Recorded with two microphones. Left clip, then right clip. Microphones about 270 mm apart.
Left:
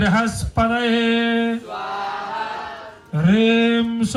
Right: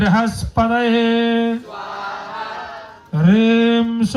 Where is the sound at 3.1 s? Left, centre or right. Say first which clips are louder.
Right 1 dB; right.